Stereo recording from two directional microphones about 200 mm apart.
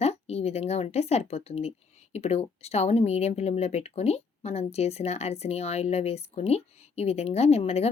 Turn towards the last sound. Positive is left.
turn(degrees=30)  # may be behind; listen again after turning